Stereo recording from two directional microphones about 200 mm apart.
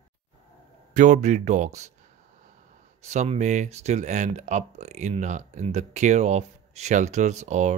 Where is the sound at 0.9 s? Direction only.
35° right (ahead or behind).